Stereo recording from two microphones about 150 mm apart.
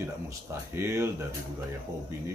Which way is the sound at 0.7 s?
15° right (ahead or behind).